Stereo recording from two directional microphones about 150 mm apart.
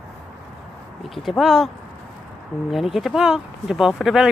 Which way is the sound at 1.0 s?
Centre (ahead or behind).